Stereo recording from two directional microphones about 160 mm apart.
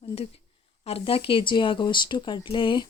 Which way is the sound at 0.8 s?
35° left (ahead or behind).